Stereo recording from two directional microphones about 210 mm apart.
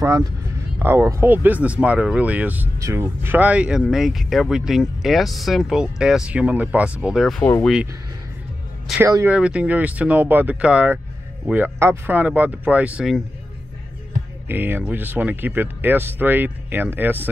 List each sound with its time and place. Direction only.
0.8 s speech: 10° right (ahead or behind); by 7.7 s 5° left (ahead or behind)
9.0 s speech: 10° right (ahead or behind)
14.5 s speech: 10° right (ahead or behind)